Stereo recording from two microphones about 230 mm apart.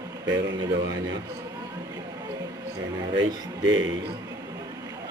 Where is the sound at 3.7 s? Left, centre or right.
Right.